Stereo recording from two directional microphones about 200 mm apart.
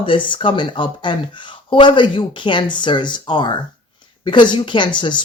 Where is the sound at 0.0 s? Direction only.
25° left (ahead or behind).